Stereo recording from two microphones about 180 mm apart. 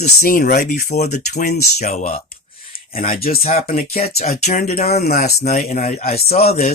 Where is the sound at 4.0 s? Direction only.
35° left (ahead or behind).